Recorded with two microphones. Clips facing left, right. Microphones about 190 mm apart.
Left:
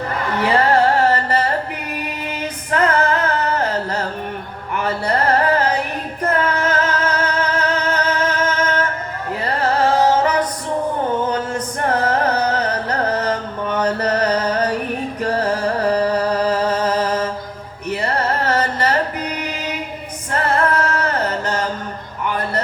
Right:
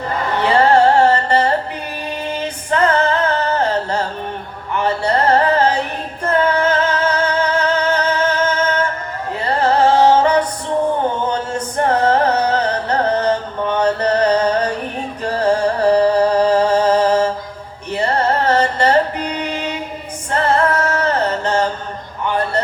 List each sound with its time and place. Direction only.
0.4 s music: 30° right (ahead or behind)
2.0 s female singing: 30° right (ahead or behind)
4.7 s music: 30° right (ahead or behind)
20.3 s a capella: 30° right (ahead or behind)